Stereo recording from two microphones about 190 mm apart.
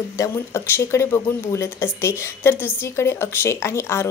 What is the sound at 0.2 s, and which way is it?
Speech, 15° left (ahead or behind).